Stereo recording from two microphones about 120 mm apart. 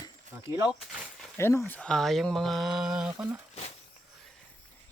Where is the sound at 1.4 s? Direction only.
20° left (ahead or behind); by 3.2 s 5° right (ahead or behind).